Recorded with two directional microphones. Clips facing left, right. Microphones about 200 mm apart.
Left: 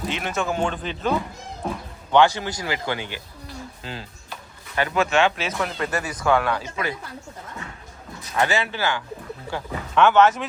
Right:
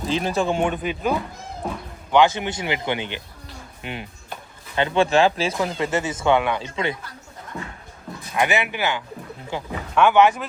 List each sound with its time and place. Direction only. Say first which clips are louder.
0.1 s speech: right 6 dB; 30° right (ahead or behind)
0.6 s speech: right 2 dB; 15° right (ahead or behind)
2.1 s speech: even; 20° right (ahead or behind)
5.5 s speech: right 3 dB; 20° right (ahead or behind)
8.4 s speech: right 1 dB; 15° right (ahead or behind)